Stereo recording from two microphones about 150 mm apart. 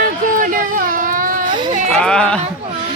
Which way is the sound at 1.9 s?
5° left (ahead or behind).